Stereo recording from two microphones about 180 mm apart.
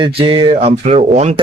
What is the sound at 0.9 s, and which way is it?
Speech, 40° right (ahead or behind).